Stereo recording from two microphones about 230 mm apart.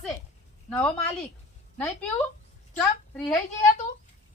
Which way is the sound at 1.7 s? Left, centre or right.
Centre.